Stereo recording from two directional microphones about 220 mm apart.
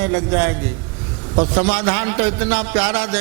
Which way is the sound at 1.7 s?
15° right (ahead or behind).